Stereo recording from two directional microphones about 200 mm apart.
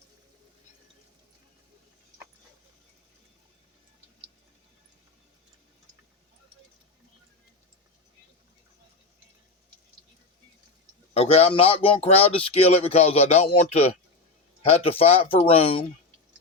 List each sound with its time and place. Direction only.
11.1 s speech: 30° left (ahead or behind)